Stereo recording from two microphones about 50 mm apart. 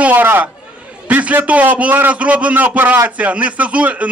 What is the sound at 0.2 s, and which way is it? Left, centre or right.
Speech, right.